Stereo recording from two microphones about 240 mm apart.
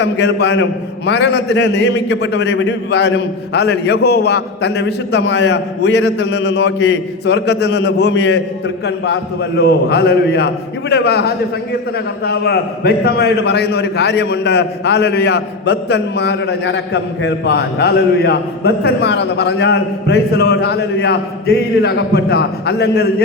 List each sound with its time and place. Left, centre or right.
0.0 s a man's voice: left